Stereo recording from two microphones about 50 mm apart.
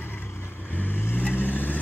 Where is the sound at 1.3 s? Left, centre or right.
Left.